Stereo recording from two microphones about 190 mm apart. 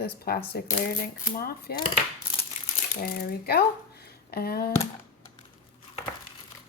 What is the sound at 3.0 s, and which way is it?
Speech, 55° left (ahead or behind).